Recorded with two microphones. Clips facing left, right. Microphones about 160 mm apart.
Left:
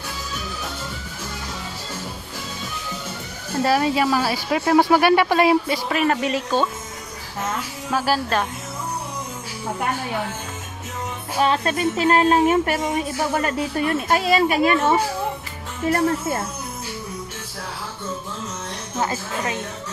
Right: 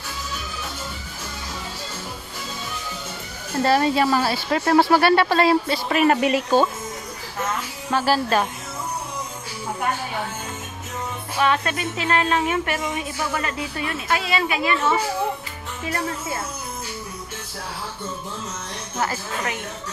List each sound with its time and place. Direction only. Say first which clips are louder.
3.5 s speech: even; 5° left (ahead or behind)
5.9 s speech: right 6 dB; 5° right (ahead or behind)
7.9 s a woman's voice: right 1 dB; centre (ahead or behind)
11.3 s speech: left 2 dB; 35° left (ahead or behind)
18.9 s speech: left 1 dB; 25° left (ahead or behind)